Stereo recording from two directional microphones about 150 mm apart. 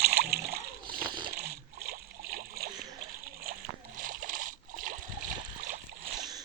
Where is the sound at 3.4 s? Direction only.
70° right (ahead or behind).